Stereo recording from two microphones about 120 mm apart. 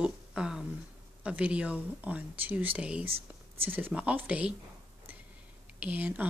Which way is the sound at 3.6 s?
15° right (ahead or behind).